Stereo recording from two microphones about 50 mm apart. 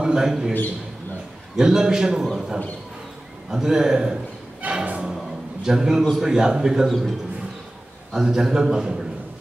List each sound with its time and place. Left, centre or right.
0.0 s a man's voice: centre
1.6 s a man's voice: centre
4.6 s music: right
5.0 s a sound: centre
6.1 s a man's voice: centre
6.9 s a man's voice: centre